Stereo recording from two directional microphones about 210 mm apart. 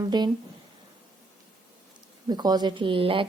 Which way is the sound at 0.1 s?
20° right (ahead or behind).